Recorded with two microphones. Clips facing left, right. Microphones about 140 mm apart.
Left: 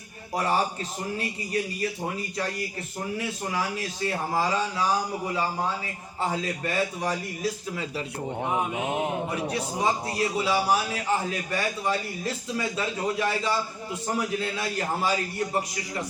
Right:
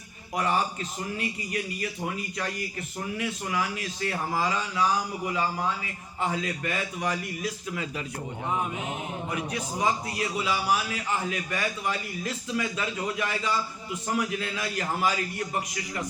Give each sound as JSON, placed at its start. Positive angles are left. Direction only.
{"t": 0.3, "sound": "a man's voice", "side_deg": 35}
{"t": 8.9, "sound": "speech", "side_deg": 70}
{"t": 9.3, "sound": "a man's voice", "side_deg": 35}